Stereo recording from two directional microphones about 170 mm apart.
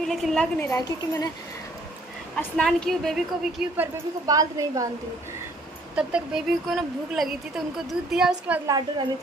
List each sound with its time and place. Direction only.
0.1 s a woman's voice: centre (ahead or behind)
0.6 s a woman's voice: 15° left (ahead or behind)
2.3 s a woman's voice: 5° left (ahead or behind)
3.7 s a woman's voice: 15° right (ahead or behind)
5.9 s a woman's voice: 5° right (ahead or behind)
8.6 s a woman's voice: 20° right (ahead or behind)